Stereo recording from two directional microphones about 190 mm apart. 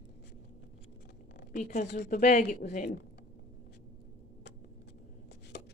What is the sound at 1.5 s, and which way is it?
Speech, 40° left (ahead or behind).